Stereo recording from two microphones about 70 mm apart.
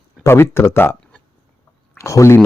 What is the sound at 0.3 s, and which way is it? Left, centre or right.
Speech, left.